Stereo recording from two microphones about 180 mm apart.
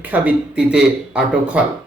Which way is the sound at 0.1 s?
5° right (ahead or behind).